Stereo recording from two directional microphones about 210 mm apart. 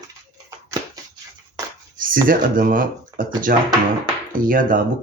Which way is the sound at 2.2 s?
40° right (ahead or behind).